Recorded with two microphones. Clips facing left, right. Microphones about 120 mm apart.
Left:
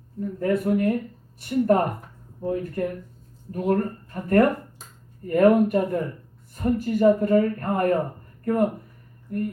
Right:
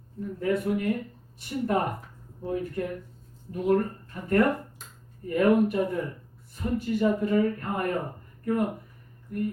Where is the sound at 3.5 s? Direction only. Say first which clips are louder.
Left 1 dB; 50° left (ahead or behind).